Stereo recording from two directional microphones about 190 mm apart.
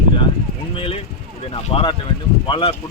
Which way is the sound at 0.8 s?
30° left (ahead or behind).